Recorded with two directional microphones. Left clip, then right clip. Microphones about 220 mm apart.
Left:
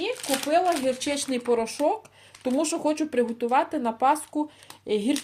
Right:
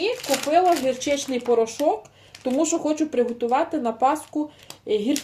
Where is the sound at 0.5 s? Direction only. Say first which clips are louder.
Right 4 dB; 50° left (ahead or behind).